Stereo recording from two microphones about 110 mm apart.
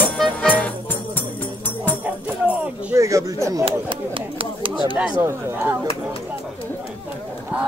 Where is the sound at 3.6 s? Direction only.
55° right (ahead or behind).